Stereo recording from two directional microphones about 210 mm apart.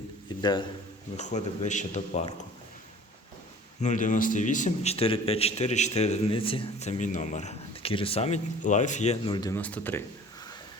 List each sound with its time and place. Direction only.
1.1 s a man's voice: 35° left (ahead or behind)
3.8 s a man's voice: 35° left (ahead or behind); by 9.6 s 20° left (ahead or behind)
9.6 s speech: 5° left (ahead or behind)